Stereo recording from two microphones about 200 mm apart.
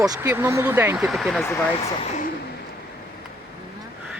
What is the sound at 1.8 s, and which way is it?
Speech, 35° left (ahead or behind).